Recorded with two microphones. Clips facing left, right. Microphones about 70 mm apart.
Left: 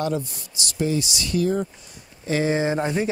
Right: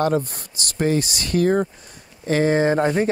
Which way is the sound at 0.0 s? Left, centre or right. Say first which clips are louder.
Right 5 dB; right.